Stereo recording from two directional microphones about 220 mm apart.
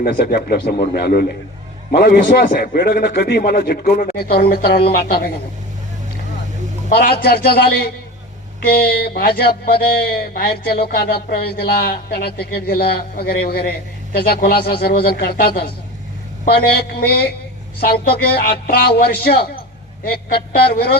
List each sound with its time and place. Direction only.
0.0 s speech: 40° left (ahead or behind)
6.9 s speech: 45° left (ahead or behind)